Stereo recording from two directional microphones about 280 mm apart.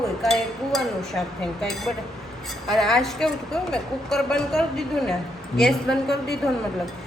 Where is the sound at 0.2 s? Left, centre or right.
Centre.